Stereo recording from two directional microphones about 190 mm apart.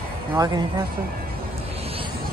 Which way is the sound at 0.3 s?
20° right (ahead or behind).